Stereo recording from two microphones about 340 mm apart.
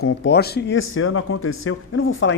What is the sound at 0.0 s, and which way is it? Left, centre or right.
Speech, left.